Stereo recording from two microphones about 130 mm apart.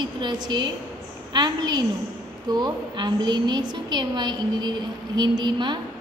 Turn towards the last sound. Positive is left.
turn(degrees=-35)  # may be behind; listen again after turning